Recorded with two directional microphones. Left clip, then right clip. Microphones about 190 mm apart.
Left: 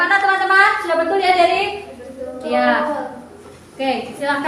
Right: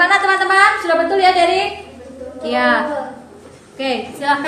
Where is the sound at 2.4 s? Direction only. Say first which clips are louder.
Right 1 dB; 60° right (ahead or behind).